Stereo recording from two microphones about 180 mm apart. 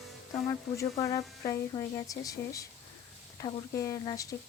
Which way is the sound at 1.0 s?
20° left (ahead or behind).